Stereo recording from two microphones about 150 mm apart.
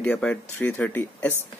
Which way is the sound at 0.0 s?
5° left (ahead or behind).